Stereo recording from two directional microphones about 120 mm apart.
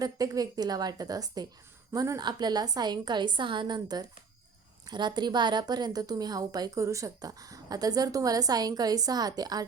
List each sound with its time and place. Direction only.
0.0 s a woman's voice: 30° right (ahead or behind)